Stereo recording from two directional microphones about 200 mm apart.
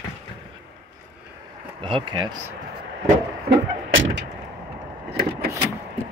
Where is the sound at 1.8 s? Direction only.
25° right (ahead or behind).